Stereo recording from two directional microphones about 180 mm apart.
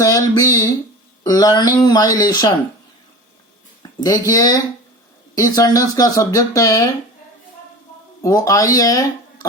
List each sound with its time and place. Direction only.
0.0 s a sound: 20° left (ahead or behind)
1.8 s speech: 20° left (ahead or behind)
4.0 s speech: 20° left (ahead or behind)
8.2 s speech: 20° left (ahead or behind)